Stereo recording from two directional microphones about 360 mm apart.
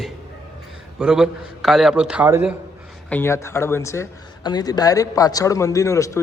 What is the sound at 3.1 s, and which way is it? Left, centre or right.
A man's voice, centre.